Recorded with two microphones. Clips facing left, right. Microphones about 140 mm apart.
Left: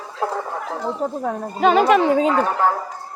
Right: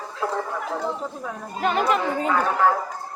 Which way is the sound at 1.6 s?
90° left.